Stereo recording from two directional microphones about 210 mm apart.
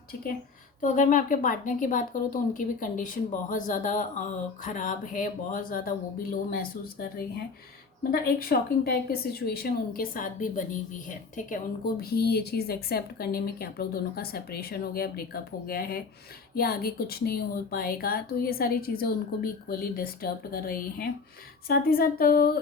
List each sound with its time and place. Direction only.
0.8 s a woman's voice: 40° left (ahead or behind)